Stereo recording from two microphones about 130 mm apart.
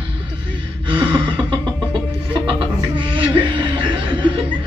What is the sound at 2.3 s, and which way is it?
Chuckle, 40° right (ahead or behind).